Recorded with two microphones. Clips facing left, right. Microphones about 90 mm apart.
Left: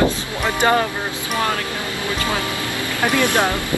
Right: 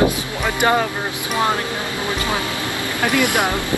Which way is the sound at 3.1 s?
15° right (ahead or behind).